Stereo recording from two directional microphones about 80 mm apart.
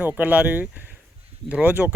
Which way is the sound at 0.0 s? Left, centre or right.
Centre.